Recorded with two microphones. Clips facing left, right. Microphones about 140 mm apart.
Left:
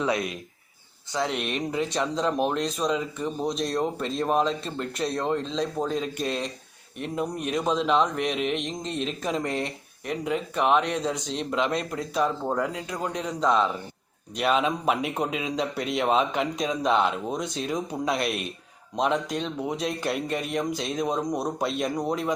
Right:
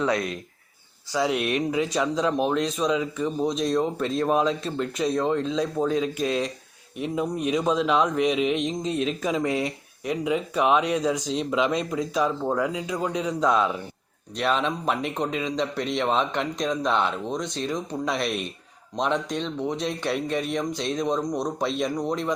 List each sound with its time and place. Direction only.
0.0 s speech: 20° left (ahead or behind)
1.1 s speech: 5° right (ahead or behind)